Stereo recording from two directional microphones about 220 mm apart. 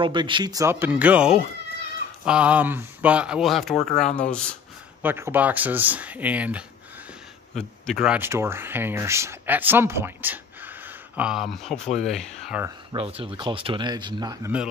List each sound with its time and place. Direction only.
0.0 s speech: 20° right (ahead or behind); by 4.6 s 5° left (ahead or behind)
5.0 s speech: 10° right (ahead or behind)
12.9 s speech: 25° right (ahead or behind)